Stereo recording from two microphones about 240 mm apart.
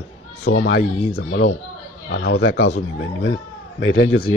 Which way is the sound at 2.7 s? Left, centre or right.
Left.